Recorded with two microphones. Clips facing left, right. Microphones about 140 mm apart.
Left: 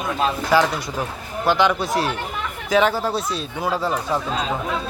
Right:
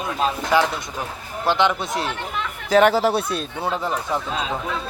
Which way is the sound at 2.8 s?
80° right.